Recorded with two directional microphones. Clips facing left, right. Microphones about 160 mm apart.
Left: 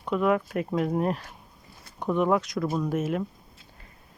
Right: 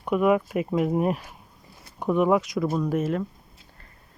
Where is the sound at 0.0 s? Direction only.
15° right (ahead or behind); by 3.2 s 5° left (ahead or behind).